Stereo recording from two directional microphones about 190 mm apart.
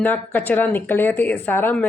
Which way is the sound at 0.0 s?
10° left (ahead or behind).